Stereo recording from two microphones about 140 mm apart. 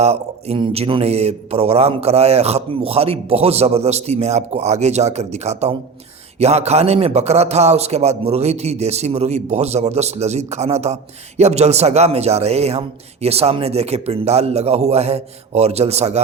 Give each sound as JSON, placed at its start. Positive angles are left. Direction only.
{"t": 0.0, "sound": "a man's voice", "side_deg": -50}